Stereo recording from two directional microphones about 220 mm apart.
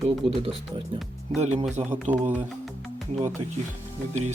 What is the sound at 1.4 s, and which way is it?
Speech, 30° right (ahead or behind).